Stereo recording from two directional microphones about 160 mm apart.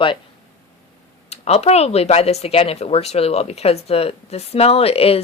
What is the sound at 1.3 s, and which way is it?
Speech, 40° left (ahead or behind).